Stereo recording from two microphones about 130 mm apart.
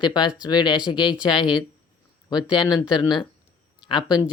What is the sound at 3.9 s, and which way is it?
Speech, 30° left (ahead or behind).